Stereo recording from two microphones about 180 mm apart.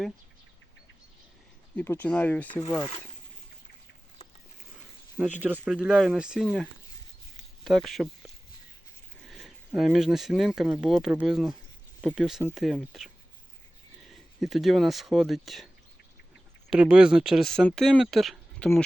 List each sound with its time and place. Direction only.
1.7 s speech: 10° left (ahead or behind)
5.1 s speech: 10° right (ahead or behind)
9.2 s speech: centre (ahead or behind)
14.4 s speech: centre (ahead or behind)